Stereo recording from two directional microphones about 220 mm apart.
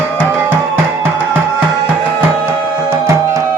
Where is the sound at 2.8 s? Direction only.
10° right (ahead or behind).